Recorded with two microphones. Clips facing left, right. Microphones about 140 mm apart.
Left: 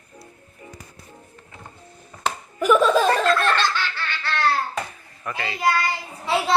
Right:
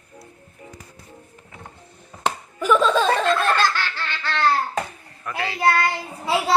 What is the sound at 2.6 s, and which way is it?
Laughter, 10° left (ahead or behind).